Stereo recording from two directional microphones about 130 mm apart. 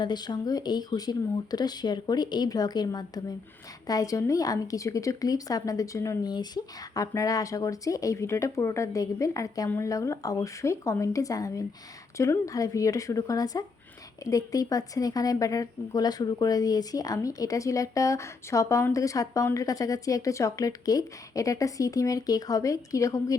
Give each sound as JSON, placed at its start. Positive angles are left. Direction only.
{"t": 0.0, "sound": "speech", "side_deg": 35}